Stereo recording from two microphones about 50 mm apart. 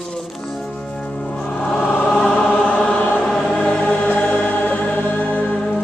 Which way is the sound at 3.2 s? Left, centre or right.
Centre.